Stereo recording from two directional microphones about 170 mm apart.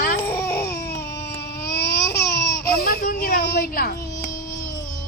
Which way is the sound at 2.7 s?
60° left (ahead or behind).